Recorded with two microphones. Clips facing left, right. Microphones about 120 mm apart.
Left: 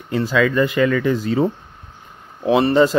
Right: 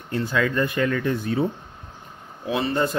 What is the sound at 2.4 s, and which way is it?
Speech, 70° left (ahead or behind).